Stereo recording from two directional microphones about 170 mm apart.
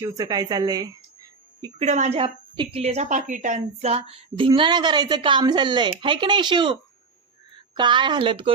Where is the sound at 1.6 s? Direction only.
40° right (ahead or behind).